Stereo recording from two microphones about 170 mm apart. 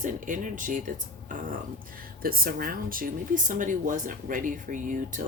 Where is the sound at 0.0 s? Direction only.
50° right (ahead or behind).